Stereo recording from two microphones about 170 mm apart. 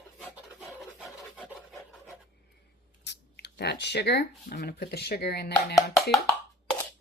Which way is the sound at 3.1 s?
80° left.